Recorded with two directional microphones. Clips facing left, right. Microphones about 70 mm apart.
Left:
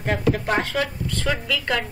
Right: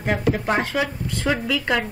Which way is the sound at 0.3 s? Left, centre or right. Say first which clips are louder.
Even; centre.